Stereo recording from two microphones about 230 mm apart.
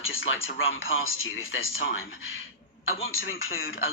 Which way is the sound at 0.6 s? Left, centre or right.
Left.